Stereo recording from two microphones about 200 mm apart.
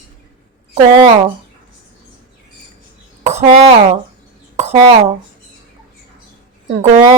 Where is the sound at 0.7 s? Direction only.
30° right (ahead or behind).